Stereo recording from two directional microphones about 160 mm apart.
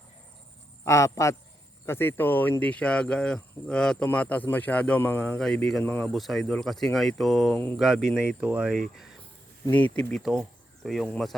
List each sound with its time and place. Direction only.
0.9 s a man's voice: 20° left (ahead or behind)
6.1 s speech: centre (ahead or behind)
9.6 s speech: 10° left (ahead or behind)